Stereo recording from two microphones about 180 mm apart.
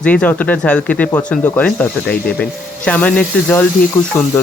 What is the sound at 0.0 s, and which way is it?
Speech, 5° left (ahead or behind).